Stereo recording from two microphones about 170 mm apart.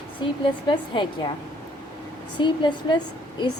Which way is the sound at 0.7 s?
30° left (ahead or behind).